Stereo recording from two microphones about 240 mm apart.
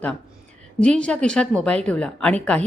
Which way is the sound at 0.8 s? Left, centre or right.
Centre.